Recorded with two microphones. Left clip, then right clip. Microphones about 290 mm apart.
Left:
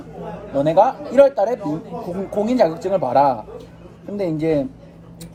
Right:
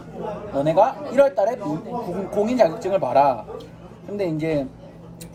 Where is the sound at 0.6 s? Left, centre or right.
Centre.